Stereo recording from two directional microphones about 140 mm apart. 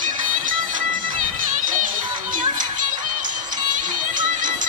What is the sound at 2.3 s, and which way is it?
Music, 70° right (ahead or behind).